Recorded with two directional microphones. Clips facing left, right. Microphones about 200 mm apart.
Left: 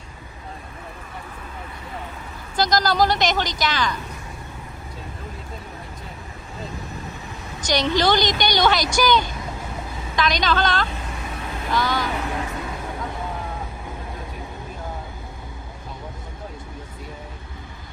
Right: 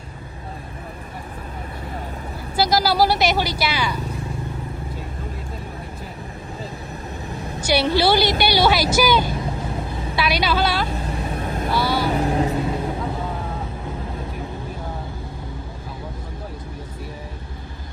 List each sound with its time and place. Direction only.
2.6 s a woman's voice: 10° right (ahead or behind)
7.6 s a woman's voice: 10° right (ahead or behind)
10.9 s vehicle: 35° right (ahead or behind)
11.7 s a woman's voice: 10° right (ahead or behind)
12.0 s vehicle: 35° right (ahead or behind)